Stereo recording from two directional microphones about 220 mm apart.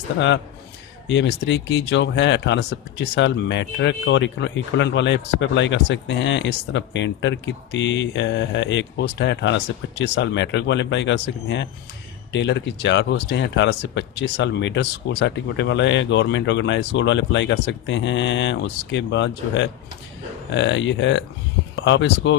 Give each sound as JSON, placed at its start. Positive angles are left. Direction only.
{"t": 1.0, "sound": "speech", "side_deg": 55}